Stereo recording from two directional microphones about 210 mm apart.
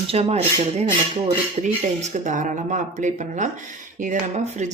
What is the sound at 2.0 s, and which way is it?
Speech, 35° right (ahead or behind).